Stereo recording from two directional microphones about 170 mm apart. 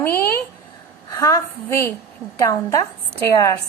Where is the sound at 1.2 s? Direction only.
15° left (ahead or behind).